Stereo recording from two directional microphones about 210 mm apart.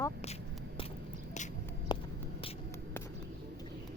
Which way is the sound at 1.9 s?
20° left (ahead or behind).